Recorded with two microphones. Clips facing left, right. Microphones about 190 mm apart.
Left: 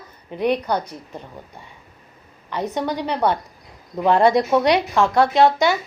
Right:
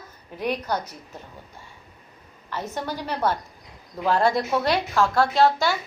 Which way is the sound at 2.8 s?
65° left (ahead or behind).